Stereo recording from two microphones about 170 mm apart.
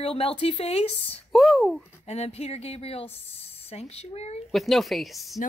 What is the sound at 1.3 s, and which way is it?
Speech, centre (ahead or behind).